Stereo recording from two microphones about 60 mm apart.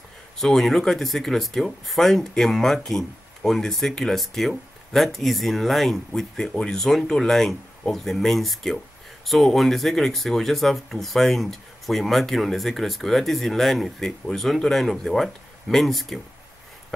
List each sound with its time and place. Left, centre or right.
0.4 s speech: centre